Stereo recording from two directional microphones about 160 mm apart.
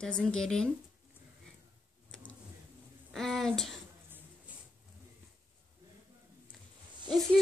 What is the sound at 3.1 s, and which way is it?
Speech, centre (ahead or behind).